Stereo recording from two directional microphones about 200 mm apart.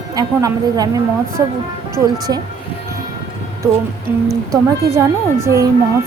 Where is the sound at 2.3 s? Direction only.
20° right (ahead or behind).